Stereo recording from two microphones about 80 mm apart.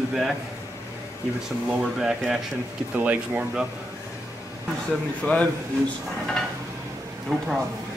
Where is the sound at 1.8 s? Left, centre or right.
Centre.